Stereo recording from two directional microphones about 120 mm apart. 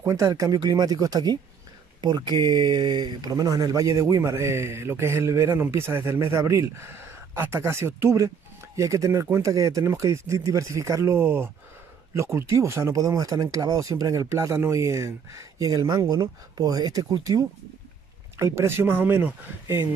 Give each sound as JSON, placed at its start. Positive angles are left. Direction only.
{"t": 0.0, "sound": "speech", "side_deg": -25}